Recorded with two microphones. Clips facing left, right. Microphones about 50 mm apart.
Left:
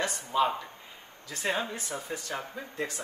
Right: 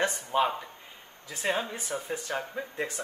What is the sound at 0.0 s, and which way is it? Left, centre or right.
Speech, right.